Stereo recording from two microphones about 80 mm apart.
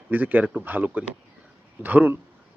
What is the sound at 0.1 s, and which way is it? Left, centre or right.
Speech, right.